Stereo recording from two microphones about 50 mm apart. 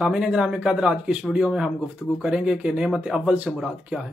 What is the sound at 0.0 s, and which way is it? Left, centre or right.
Speech, centre.